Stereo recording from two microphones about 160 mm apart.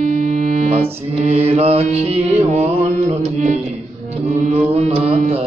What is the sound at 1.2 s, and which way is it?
Mantra, 40° right (ahead or behind).